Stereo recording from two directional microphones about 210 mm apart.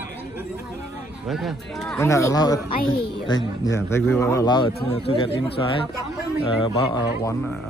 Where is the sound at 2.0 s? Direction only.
15° left (ahead or behind).